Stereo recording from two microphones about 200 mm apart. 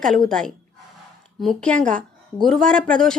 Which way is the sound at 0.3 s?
5° left (ahead or behind).